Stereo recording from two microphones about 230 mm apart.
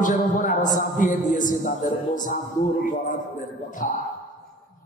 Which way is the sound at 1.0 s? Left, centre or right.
Left.